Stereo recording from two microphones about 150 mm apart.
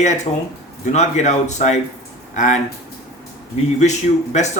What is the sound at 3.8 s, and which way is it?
Speech, 50° left (ahead or behind).